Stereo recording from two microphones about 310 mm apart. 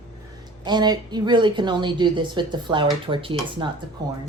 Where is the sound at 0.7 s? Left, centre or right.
Centre.